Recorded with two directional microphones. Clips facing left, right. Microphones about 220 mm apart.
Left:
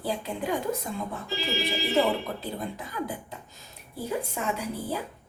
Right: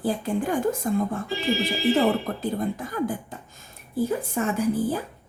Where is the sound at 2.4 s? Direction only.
45° right (ahead or behind).